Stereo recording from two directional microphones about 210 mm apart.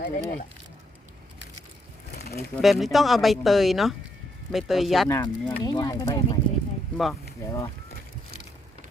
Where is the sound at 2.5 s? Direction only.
Centre (ahead or behind).